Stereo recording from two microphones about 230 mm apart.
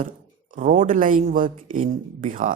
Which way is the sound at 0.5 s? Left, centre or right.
Right.